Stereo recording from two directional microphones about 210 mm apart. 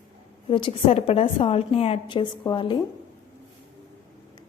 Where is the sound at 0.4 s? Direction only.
25° left (ahead or behind).